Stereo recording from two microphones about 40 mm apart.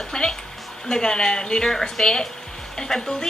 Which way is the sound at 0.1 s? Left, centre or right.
Centre.